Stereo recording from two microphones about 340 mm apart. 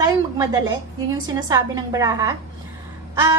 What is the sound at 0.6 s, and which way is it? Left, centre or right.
A woman's voice, centre.